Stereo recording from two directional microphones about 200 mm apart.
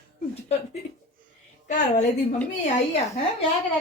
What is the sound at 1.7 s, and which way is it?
Speech, 40° left (ahead or behind).